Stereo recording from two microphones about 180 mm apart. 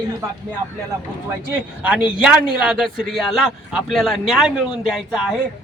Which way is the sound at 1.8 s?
5° right (ahead or behind).